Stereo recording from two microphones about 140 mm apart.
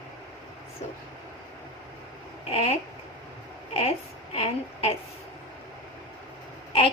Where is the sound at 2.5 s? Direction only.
45° left (ahead or behind).